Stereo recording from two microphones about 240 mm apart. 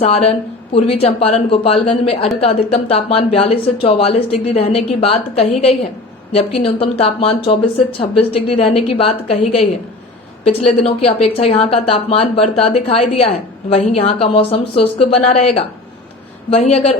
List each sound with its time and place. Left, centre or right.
0.0 s a woman's voice: left